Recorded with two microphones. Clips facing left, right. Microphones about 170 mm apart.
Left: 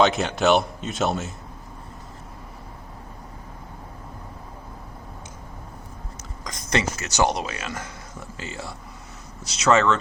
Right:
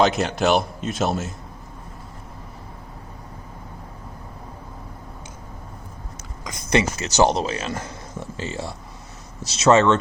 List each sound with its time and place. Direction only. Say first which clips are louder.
0.0 s a man's voice: even; centre (ahead or behind)
6.4 s a sound: right 2 dB; 5° right (ahead or behind)
7.0 s speech: right 4 dB; 30° right (ahead or behind)